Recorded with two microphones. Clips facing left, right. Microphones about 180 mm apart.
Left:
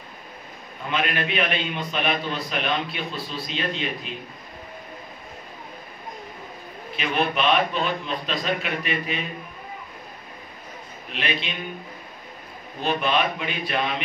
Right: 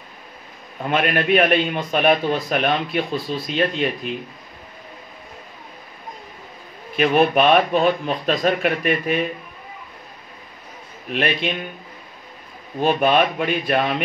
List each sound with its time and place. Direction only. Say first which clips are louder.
0.8 s speech: right 7 dB; 50° right (ahead or behind)
7.0 s speech: right 8 dB; 50° right (ahead or behind)
11.1 s speech: right 7 dB; 50° right (ahead or behind)
12.8 s speech: right 6 dB; 50° right (ahead or behind)